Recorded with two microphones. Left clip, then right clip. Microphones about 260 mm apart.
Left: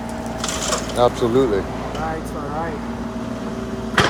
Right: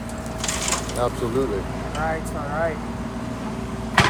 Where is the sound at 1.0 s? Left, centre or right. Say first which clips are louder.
Left 9 dB; left.